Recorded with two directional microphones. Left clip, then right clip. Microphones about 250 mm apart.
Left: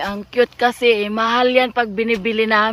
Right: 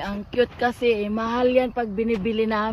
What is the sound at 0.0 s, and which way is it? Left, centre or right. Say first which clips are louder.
Speech: left 5 dB; centre.